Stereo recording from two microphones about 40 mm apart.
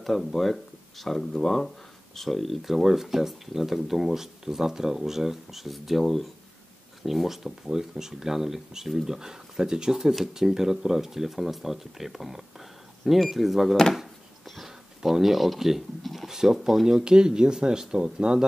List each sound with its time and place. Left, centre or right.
0.0 s speech: centre
15.0 s speech: centre
16.8 s speech: centre